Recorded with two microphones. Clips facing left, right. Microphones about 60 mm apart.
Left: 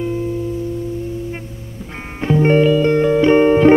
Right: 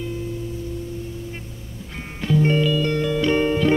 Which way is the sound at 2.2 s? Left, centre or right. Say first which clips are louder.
Left 7 dB; left.